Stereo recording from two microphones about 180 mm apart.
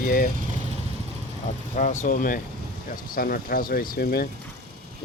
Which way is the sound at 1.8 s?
45° left (ahead or behind).